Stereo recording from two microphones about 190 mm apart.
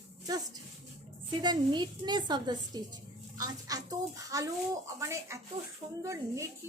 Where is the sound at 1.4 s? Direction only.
25° right (ahead or behind).